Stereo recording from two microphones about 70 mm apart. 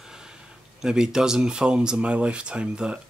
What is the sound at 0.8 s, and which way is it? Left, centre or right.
Speech, centre.